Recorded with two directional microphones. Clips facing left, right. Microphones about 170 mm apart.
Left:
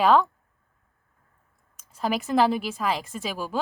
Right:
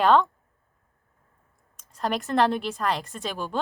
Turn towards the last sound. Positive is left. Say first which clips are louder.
# left 1 dB
turn(degrees=5)  # may be behind; listen again after turning